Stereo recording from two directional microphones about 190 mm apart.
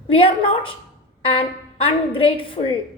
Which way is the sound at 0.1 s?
30° left (ahead or behind).